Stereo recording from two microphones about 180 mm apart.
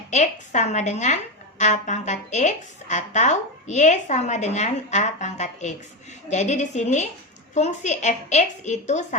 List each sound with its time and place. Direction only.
0.1 s a woman's voice: 40° left (ahead or behind)